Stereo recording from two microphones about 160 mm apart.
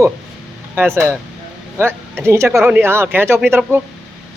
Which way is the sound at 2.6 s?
10° right (ahead or behind).